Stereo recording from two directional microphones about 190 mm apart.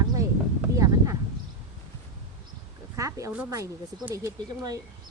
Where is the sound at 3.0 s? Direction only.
15° right (ahead or behind).